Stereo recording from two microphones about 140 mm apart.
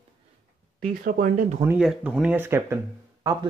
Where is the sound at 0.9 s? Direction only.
75° right (ahead or behind).